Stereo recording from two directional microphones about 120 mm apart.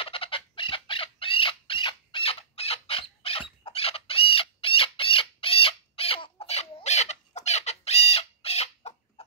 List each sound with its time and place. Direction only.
0.0 s chicken: 50° left (ahead or behind)